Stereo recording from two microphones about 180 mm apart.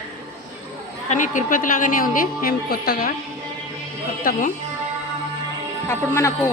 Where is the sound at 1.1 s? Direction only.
45° left (ahead or behind).